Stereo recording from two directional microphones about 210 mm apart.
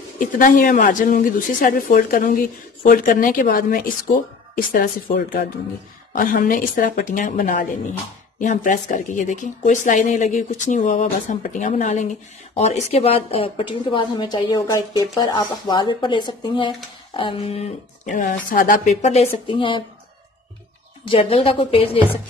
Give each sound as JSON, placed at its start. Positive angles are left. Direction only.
{"t": 0.2, "sound": "a woman's voice", "side_deg": 40}
{"t": 21.1, "sound": "a woman's voice", "side_deg": 25}